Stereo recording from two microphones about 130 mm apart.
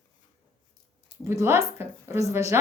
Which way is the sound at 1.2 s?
20° right (ahead or behind).